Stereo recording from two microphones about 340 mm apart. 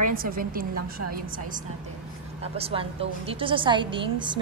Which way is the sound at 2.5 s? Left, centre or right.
Centre.